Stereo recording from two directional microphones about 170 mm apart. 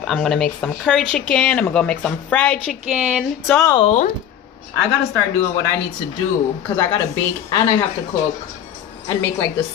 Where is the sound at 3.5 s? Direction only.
20° left (ahead or behind).